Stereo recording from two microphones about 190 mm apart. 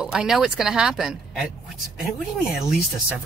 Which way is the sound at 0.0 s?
5° right (ahead or behind).